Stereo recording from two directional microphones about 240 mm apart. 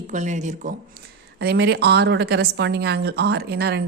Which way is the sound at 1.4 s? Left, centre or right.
Right.